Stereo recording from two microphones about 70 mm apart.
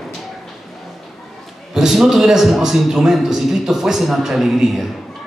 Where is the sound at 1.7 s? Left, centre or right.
Centre.